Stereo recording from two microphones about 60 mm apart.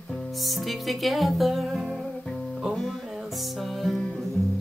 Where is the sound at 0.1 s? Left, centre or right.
Centre.